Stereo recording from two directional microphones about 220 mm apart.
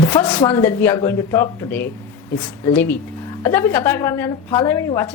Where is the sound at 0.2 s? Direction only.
5° left (ahead or behind).